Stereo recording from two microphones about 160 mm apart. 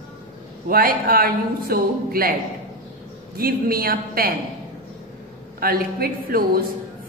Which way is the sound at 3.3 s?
70° right (ahead or behind).